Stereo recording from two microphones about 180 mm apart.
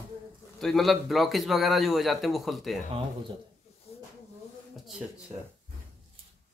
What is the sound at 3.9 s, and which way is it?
Snake, 35° left (ahead or behind).